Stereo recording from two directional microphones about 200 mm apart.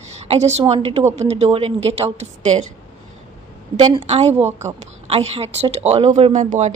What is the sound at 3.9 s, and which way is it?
A woman's voice, 30° right (ahead or behind).